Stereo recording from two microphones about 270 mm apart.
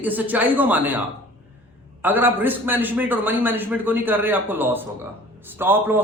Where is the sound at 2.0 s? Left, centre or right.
Centre.